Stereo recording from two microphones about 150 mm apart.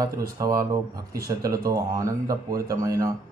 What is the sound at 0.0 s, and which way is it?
A man's voice, 25° right (ahead or behind).